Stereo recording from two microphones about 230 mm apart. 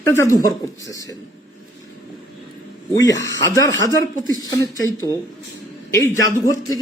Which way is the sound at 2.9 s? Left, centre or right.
Centre.